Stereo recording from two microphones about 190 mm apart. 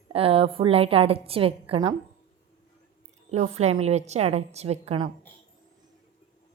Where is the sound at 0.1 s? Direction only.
30° right (ahead or behind).